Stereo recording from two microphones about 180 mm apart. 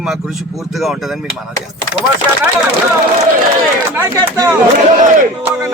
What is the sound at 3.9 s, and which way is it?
Speech, 15° right (ahead or behind).